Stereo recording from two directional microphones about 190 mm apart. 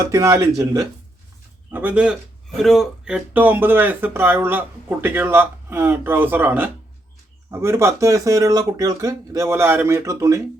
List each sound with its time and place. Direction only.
0.0 s speech: 15° right (ahead or behind)